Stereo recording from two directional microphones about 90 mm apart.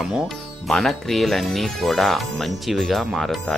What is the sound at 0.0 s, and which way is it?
Speech, 5° right (ahead or behind).